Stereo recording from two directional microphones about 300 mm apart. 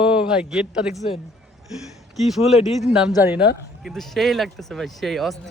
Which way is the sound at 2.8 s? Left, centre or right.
Centre.